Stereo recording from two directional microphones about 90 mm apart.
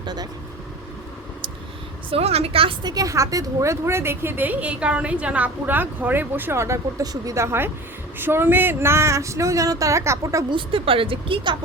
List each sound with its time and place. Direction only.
0.0 s vehicle: 50° right (ahead or behind)
2.0 s a woman's voice: 90° right
2.8 s a woman's voice: 45° right (ahead or behind)
7.0 s speech: 45° right (ahead or behind)
10.5 s speech: 85° right